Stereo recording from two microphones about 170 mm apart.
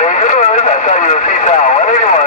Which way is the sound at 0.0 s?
45° left (ahead or behind).